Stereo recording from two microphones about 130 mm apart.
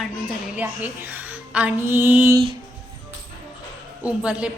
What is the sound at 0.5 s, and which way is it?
Speech, 15° right (ahead or behind).